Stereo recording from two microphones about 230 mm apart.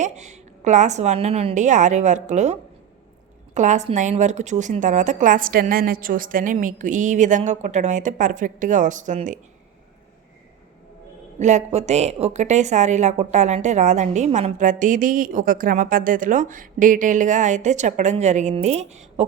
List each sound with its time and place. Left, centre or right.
0.0 s a woman's voice: right
11.3 s a woman's voice: right